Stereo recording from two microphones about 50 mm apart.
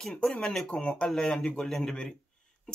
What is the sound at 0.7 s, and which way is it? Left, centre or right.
Speech, left.